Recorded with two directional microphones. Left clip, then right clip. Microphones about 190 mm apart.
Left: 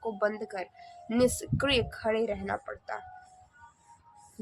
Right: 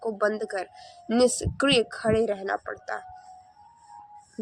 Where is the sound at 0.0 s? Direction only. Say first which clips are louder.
Right 4 dB; 35° right (ahead or behind).